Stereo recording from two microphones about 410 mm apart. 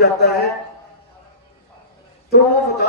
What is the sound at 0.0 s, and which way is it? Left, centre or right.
Speech, left.